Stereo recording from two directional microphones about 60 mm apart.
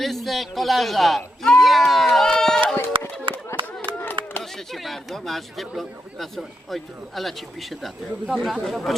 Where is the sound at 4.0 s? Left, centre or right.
Left.